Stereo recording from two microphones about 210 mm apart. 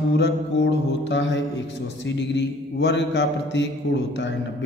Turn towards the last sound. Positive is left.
turn(degrees=55)  # may be behind; listen again after turning